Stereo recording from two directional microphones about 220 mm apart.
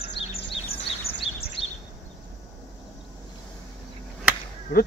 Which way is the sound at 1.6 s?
25° left (ahead or behind).